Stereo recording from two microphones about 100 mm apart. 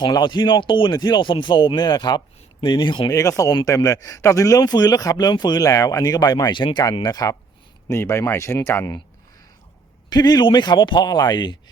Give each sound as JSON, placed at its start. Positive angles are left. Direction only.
{"t": 0.0, "sound": "speech", "side_deg": 50}
{"t": 3.1, "sound": "speech", "side_deg": 35}
{"t": 7.9, "sound": "speech", "side_deg": 30}
{"t": 10.1, "sound": "speech", "side_deg": 45}